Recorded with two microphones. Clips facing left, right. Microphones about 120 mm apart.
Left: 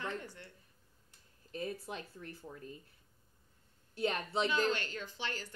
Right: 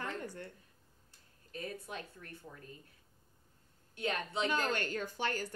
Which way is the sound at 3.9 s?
30° left (ahead or behind).